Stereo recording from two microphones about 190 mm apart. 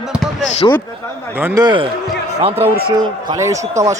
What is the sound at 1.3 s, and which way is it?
Speech, 10° right (ahead or behind).